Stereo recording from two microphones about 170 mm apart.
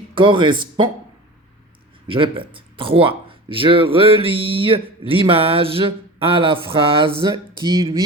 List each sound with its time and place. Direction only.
0.1 s speech: 30° right (ahead or behind)
2.0 s speech: 30° right (ahead or behind)